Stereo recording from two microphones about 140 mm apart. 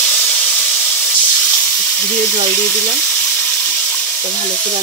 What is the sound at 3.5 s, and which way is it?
Water, 10° left (ahead or behind).